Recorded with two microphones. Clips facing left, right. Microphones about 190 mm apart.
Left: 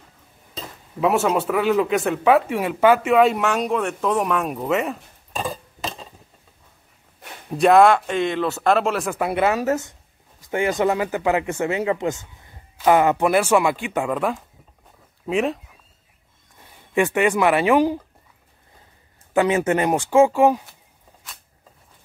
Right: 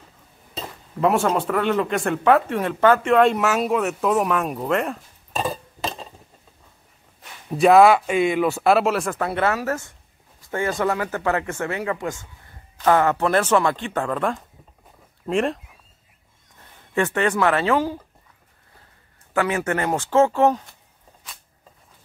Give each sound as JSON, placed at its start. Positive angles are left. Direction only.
{"t": 1.0, "sound": "speech", "side_deg": 0}
{"t": 7.5, "sound": "speech", "side_deg": 0}
{"t": 9.2, "sound": "speech", "side_deg": 15}
{"t": 16.6, "sound": "speech", "side_deg": 10}
{"t": 19.3, "sound": "speech", "side_deg": 20}